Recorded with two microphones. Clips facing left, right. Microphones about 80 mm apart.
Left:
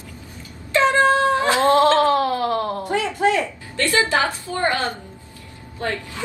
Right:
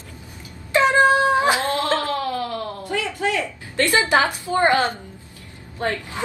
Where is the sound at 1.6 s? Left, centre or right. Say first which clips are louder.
Left 7 dB; left.